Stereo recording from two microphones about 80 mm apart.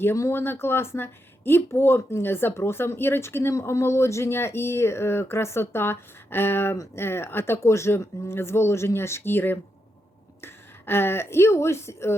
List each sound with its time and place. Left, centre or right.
0.0 s speech: left